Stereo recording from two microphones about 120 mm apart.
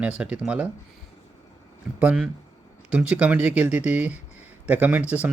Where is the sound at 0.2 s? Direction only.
10° right (ahead or behind).